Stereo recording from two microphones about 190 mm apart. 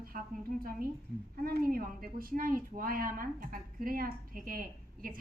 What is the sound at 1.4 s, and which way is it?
A woman's voice, 50° right (ahead or behind).